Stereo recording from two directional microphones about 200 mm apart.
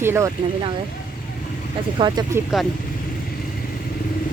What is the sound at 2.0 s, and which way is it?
Speech, 20° right (ahead or behind).